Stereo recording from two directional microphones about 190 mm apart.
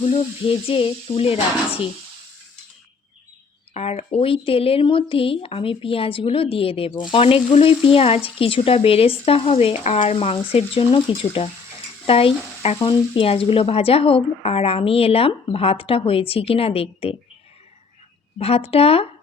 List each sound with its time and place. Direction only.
0.0 s speech: 30° left (ahead or behind)
3.8 s speech: 30° left (ahead or behind)
18.3 s speech: 30° left (ahead or behind)